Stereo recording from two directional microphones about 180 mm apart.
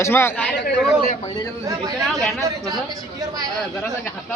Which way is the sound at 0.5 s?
75° left (ahead or behind).